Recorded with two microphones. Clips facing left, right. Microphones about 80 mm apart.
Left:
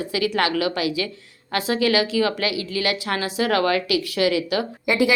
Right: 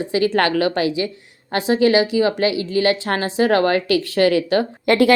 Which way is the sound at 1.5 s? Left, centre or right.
Right.